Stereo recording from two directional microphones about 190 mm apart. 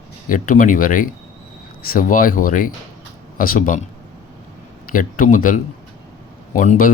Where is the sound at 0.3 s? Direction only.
45° left (ahead or behind).